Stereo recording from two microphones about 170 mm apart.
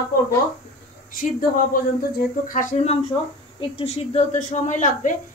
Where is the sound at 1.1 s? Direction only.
55° left (ahead or behind).